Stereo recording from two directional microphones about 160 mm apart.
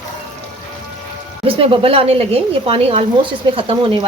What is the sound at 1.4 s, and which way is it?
A woman's voice, 35° right (ahead or behind).